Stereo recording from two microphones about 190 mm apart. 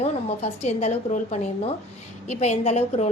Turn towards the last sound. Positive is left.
turn(degrees=35)  # may be behind; listen again after turning